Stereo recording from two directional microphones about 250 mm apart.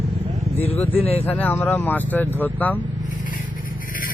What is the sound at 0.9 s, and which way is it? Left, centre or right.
Speech, left.